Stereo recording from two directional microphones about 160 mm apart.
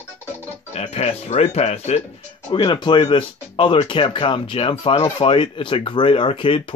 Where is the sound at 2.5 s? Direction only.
30° left (ahead or behind).